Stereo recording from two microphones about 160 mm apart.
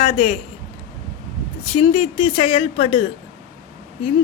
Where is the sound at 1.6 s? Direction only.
35° left (ahead or behind).